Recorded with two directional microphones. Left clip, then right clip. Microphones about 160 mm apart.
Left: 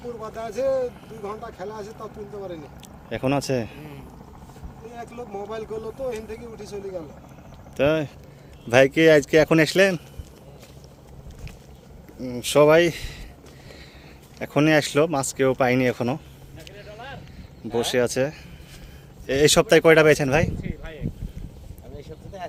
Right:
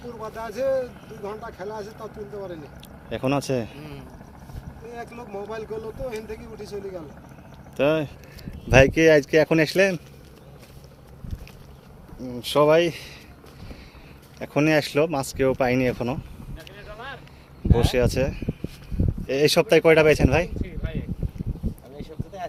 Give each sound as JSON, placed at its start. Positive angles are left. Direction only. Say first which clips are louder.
{"t": 0.0, "sound": "speech", "louder": "left 1 dB", "side_deg": -20}
{"t": 3.1, "sound": "speech", "louder": "left 1 dB", "side_deg": 10}
{"t": 3.8, "sound": "speech", "louder": "right 1 dB", "side_deg": -30}
{"t": 4.9, "sound": "speech", "louder": "even", "side_deg": -10}
{"t": 12.2, "sound": "speech", "louder": "left 3 dB", "side_deg": 30}
{"t": 14.3, "sound": "speech", "louder": "left 2 dB", "side_deg": 20}
{"t": 17.7, "sound": "speech", "louder": "even", "side_deg": 10}